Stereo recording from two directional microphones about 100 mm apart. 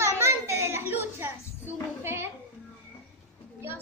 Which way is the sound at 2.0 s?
25° right (ahead or behind).